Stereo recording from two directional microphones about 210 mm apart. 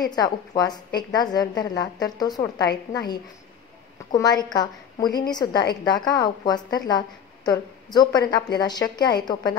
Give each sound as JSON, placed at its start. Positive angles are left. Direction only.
{"t": 0.0, "sound": "a woman's voice", "side_deg": 20}
{"t": 4.1, "sound": "a woman's voice", "side_deg": 20}